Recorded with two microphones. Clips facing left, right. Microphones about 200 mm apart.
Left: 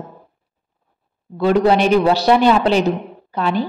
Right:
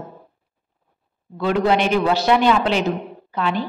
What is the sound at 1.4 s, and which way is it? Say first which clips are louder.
A woman's voice: left 4 dB; 35° left (ahead or behind).